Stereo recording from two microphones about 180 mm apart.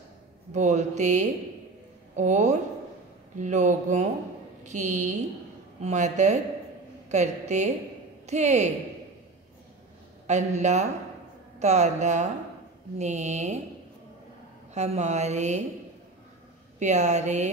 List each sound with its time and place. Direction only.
0.5 s a woman's voice: 40° right (ahead or behind)
10.2 s a woman's voice: 40° right (ahead or behind)
14.7 s a woman's voice: 40° right (ahead or behind)
16.8 s a woman's voice: 40° right (ahead or behind)